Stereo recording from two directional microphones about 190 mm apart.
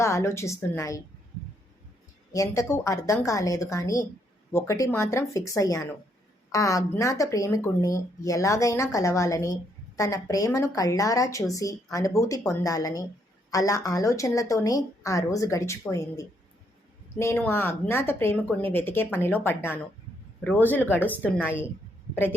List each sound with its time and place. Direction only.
0.0 s speech: 15° left (ahead or behind)
2.3 s speech: 15° left (ahead or behind)